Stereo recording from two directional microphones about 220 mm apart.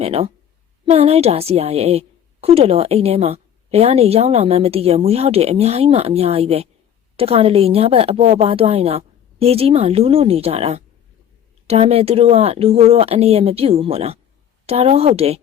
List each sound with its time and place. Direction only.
0.0 s a woman's voice: 25° right (ahead or behind)